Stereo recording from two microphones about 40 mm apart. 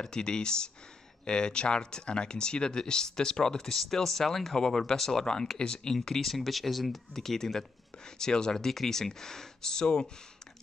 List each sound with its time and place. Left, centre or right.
0.0 s speech: centre
5.9 s speech: centre